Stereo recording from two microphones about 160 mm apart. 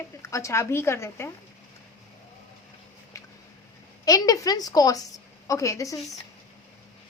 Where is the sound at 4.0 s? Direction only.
20° left (ahead or behind).